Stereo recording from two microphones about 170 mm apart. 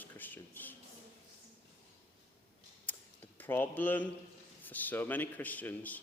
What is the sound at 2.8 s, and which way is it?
Tick-tock, 10° left (ahead or behind).